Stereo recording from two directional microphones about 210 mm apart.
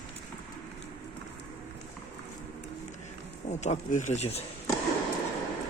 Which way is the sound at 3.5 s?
35° left (ahead or behind).